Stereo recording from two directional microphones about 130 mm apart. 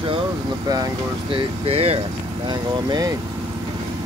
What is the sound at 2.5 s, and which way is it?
Speech, 30° right (ahead or behind).